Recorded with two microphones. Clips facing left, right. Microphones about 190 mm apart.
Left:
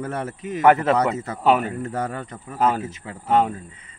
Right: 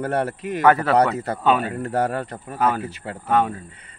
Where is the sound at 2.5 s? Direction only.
25° left (ahead or behind).